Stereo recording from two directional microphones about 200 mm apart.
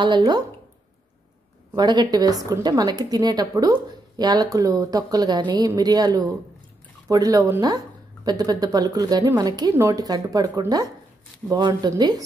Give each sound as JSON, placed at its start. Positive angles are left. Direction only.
{"t": 0.0, "sound": "speech", "side_deg": -20}
{"t": 1.8, "sound": "speech", "side_deg": -20}